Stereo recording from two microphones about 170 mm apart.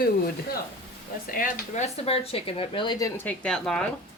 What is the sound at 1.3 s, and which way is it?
Speech, 55° left (ahead or behind).